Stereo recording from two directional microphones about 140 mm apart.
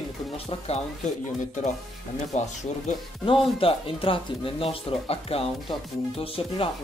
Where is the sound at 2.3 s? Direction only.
55° left (ahead or behind).